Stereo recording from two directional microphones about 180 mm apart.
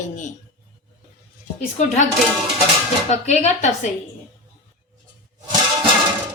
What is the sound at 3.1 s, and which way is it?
Speech, 40° left (ahead or behind).